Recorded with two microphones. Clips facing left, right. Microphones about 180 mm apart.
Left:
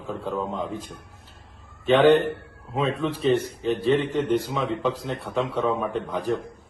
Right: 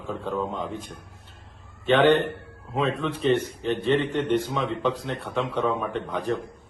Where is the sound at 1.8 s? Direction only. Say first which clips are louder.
Left 2 dB; 10° left (ahead or behind).